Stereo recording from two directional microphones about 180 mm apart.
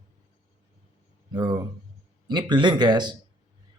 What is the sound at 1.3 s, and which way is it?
Speech, 25° right (ahead or behind).